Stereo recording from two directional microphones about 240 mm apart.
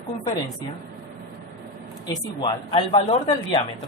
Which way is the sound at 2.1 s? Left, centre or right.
Centre.